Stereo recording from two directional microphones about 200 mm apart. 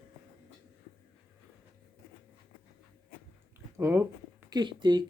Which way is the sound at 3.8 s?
10° right (ahead or behind).